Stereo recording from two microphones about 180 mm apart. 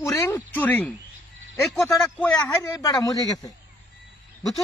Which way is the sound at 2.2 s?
15° left (ahead or behind).